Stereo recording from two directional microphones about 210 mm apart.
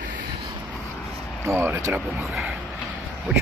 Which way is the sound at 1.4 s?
10° right (ahead or behind).